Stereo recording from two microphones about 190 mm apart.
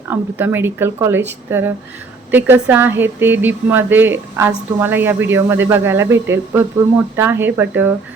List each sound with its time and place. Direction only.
0.1 s a woman's voice: 10° right (ahead or behind)